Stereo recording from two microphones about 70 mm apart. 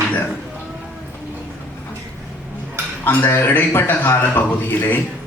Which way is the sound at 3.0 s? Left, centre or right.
Left.